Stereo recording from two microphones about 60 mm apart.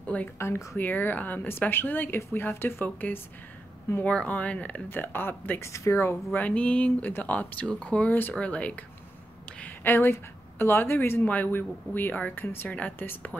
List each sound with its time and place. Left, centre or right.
0.4 s speech: left
0.7 s a woman's voice: left
4.0 s speech: left
4.8 s a woman's voice: left
5.6 s speech: left
6.5 s speech: centre
8.4 s speech: left
9.5 s a sound: left
9.8 s a woman's voice: left
11.2 s a woman's voice: left